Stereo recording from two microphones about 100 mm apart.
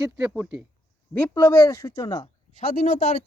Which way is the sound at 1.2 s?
30° left (ahead or behind).